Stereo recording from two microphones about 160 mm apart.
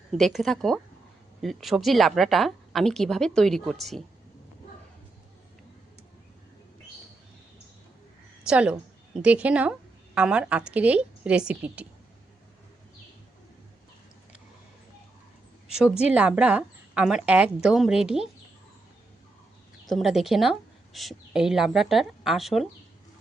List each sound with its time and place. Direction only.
0.1 s a woman's voice: centre (ahead or behind)
8.4 s a woman's voice: 5° right (ahead or behind)
15.6 s a woman's voice: 5° right (ahead or behind)
19.8 s speech: centre (ahead or behind)